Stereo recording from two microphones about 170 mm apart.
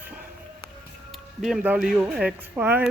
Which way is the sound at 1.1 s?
Centre (ahead or behind).